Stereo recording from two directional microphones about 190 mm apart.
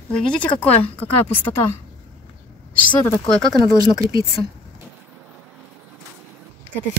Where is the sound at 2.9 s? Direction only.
15° left (ahead or behind).